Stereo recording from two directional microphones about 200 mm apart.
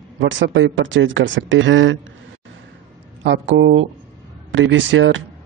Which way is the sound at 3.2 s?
70° right (ahead or behind).